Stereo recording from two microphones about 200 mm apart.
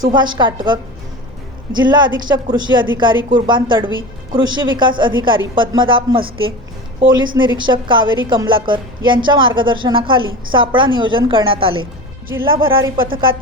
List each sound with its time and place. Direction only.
0.1 s speech: 20° right (ahead or behind)
7.3 s speech: 25° right (ahead or behind)